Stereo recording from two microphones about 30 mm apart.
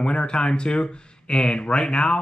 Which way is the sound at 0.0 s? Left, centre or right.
Left.